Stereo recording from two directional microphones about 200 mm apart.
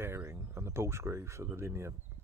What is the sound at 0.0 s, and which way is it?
Speech, 10° right (ahead or behind).